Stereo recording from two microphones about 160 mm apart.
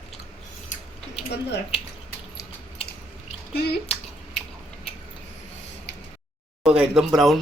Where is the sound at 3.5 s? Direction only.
85° left.